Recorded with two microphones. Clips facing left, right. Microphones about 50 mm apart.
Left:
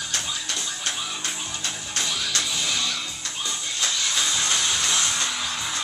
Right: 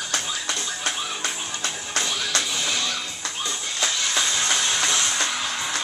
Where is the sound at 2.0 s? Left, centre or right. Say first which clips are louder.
Even; centre.